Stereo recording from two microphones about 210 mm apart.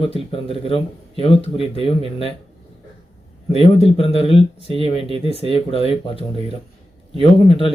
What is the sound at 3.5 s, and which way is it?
Speech, 30° left (ahead or behind).